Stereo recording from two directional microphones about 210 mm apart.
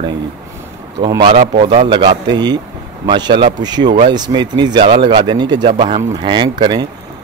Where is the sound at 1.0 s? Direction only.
25° right (ahead or behind).